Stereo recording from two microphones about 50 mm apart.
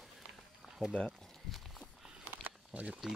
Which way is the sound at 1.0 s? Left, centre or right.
Centre.